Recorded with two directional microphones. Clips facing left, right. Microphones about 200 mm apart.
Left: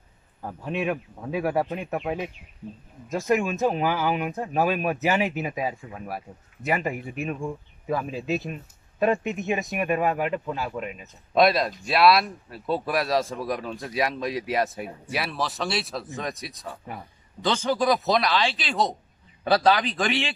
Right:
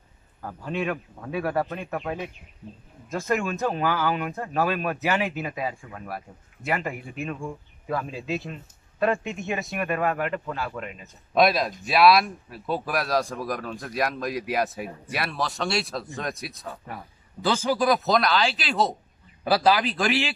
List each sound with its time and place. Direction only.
0.4 s a man's voice: 15° left (ahead or behind)
11.3 s speech: centre (ahead or behind)